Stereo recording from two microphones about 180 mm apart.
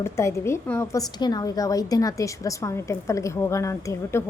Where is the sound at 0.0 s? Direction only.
15° left (ahead or behind).